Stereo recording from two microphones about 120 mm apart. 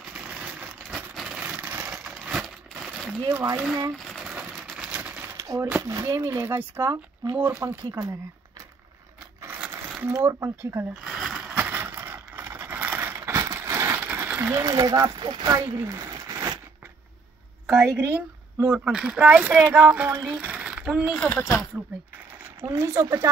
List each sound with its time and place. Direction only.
0.1 s vehicle: 10° right (ahead or behind)
3.3 s speech: 15° right (ahead or behind)
3.9 s a sound: centre (ahead or behind)
5.7 s speech: 25° right (ahead or behind)
9.4 s crushing: 20° right (ahead or behind)
10.0 s speech: 20° right (ahead or behind)
11.1 s a sound: centre (ahead or behind)
11.5 s crushing: 15° right (ahead or behind)
14.5 s speech: 30° right (ahead or behind)
15.7 s a sound: 30° right (ahead or behind)
17.6 s a woman's voice: 5° right (ahead or behind)
21.2 s speech: 15° left (ahead or behind)
22.7 s speech: 25° right (ahead or behind)